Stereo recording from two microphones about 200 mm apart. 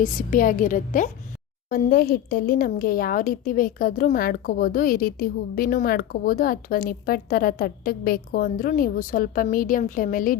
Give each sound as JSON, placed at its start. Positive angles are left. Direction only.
{"t": 0.0, "sound": "a woman's voice", "side_deg": 40}